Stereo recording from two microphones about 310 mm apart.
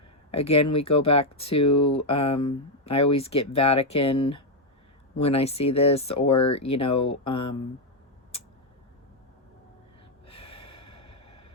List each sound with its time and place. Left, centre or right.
0.3 s speech: centre
10.2 s snort: centre